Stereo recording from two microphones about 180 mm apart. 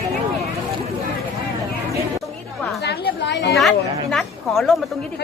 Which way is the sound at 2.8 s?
70° left (ahead or behind).